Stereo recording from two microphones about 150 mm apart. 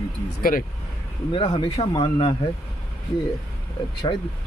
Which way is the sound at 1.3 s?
35° left (ahead or behind).